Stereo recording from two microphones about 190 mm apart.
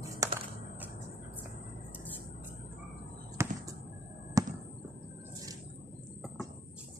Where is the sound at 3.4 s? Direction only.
15° right (ahead or behind).